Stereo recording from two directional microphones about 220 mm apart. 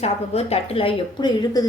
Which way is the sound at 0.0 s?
30° left (ahead or behind).